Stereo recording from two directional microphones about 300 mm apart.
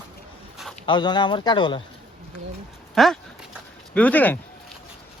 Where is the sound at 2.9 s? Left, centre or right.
Centre.